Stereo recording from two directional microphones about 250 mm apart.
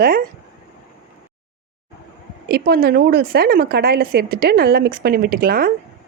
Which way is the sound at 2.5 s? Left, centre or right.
Right.